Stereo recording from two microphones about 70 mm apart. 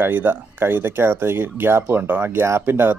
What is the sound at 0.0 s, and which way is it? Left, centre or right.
Speech, right.